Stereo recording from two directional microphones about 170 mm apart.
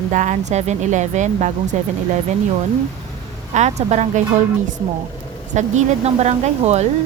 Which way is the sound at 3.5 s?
40° right (ahead or behind).